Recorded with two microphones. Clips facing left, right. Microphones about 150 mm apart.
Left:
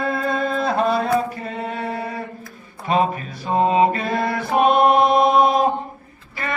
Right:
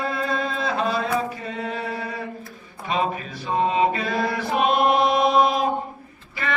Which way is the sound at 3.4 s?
50° left (ahead or behind).